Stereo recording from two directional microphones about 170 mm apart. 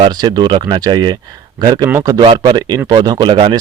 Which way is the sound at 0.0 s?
25° right (ahead or behind).